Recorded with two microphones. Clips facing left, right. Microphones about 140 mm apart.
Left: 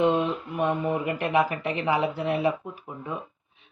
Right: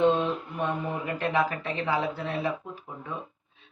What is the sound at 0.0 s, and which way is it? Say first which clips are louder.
Speech: even; 15° left (ahead or behind).